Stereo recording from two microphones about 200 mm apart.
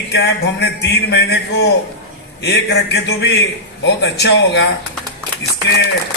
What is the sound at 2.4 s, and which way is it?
Speech, 55° left (ahead or behind).